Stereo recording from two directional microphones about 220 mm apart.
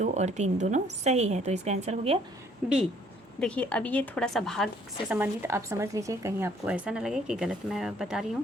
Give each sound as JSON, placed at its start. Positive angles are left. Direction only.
{"t": 0.0, "sound": "a woman's voice", "side_deg": -30}
{"t": 2.6, "sound": "a woman's voice", "side_deg": -5}
{"t": 3.4, "sound": "a woman's voice", "side_deg": 5}
{"t": 5.1, "sound": "a woman's voice", "side_deg": -10}